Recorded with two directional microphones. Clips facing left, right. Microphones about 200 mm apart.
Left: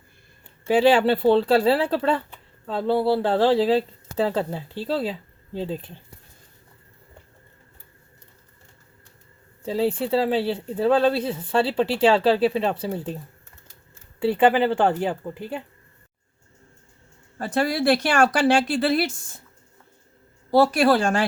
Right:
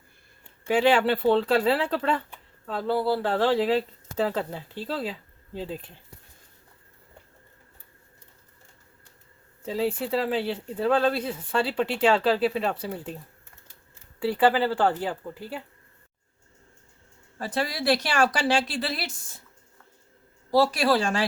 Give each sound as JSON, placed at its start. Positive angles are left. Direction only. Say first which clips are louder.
{"t": 0.7, "sound": "speech", "louder": "left 4 dB", "side_deg": 35}
{"t": 9.6, "sound": "a woman's voice", "louder": "left 4 dB", "side_deg": 30}
{"t": 14.2, "sound": "a woman's voice", "louder": "left 4 dB", "side_deg": 25}
{"t": 17.3, "sound": "speech", "louder": "left 6 dB", "side_deg": 50}
{"t": 20.5, "sound": "speech", "louder": "left 4 dB", "side_deg": 55}